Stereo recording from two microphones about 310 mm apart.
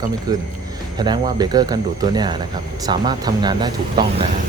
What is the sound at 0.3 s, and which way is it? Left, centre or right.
Speech, centre.